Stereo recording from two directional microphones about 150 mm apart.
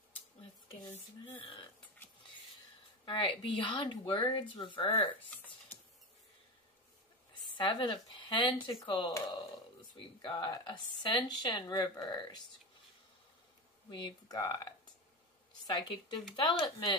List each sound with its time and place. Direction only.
1.2 s speech: 35° left (ahead or behind)
3.1 s speech: 35° left (ahead or behind)
7.5 s speech: 30° left (ahead or behind)
10.2 s speech: 35° left (ahead or behind)
13.8 s speech: 30° left (ahead or behind)